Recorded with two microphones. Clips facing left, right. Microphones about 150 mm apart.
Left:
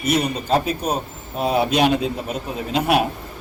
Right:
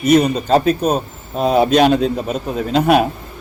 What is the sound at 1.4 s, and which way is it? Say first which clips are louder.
Speech: right 5 dB; 40° right (ahead or behind).